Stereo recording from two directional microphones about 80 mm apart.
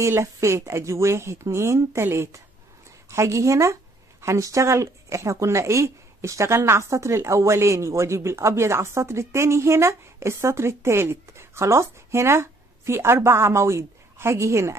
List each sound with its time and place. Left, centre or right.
0.0 s speech: right